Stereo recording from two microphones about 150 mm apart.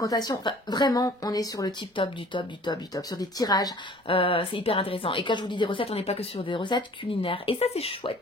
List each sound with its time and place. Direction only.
0.0 s speech: 25° left (ahead or behind); by 8.1 s 40° left (ahead or behind)